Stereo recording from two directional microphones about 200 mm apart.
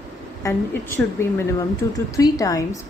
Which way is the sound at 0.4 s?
15° left (ahead or behind).